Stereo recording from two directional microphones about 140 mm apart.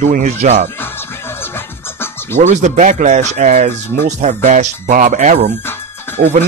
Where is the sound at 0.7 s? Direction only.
15° left (ahead or behind).